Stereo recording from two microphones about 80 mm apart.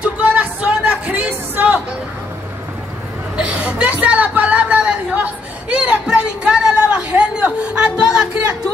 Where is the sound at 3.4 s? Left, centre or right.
Centre.